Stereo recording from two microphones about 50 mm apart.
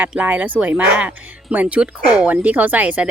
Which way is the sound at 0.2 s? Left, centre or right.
Right.